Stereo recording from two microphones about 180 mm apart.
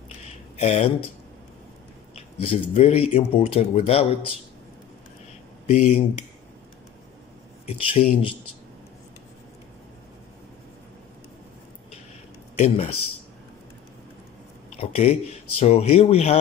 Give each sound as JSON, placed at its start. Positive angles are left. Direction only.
{"t": 0.6, "sound": "speech", "side_deg": 40}
{"t": 2.1, "sound": "speech", "side_deg": 30}
{"t": 5.7, "sound": "speech", "side_deg": 35}
{"t": 7.6, "sound": "speech", "side_deg": 30}
{"t": 12.5, "sound": "speech", "side_deg": 35}
{"t": 14.8, "sound": "speech", "side_deg": 35}